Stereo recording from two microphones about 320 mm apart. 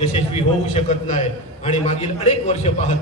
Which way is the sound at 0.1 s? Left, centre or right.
Centre.